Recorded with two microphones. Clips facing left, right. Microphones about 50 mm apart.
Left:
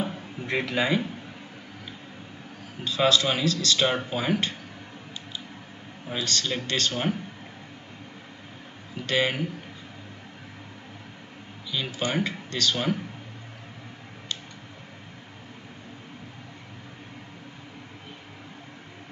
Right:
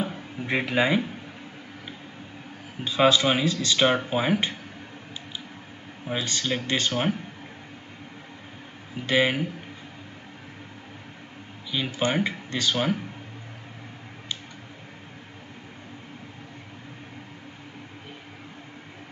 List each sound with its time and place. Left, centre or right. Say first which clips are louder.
0.4 s speech: right 3 dB; centre
2.8 s speech: right 2 dB; centre
6.0 s speech: right 1 dB; centre
9.0 s speech: right 3 dB; centre
11.7 s speech: right 2 dB; centre